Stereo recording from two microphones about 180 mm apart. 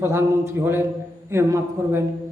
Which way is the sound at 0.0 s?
15° right (ahead or behind).